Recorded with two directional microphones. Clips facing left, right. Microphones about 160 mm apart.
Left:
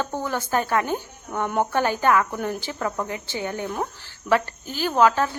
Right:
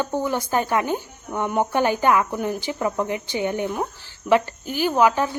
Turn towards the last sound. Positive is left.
turn(degrees=-15)  # may be behind; listen again after turning